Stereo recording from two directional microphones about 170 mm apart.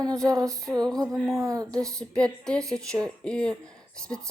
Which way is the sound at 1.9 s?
5° left (ahead or behind).